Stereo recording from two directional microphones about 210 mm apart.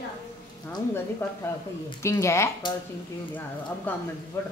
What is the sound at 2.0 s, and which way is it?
Speech, 15° left (ahead or behind).